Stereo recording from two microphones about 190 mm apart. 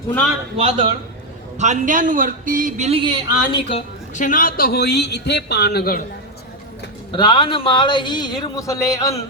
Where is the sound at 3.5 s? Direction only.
30° left (ahead or behind).